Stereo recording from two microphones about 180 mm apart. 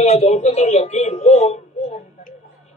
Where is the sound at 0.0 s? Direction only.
40° left (ahead or behind).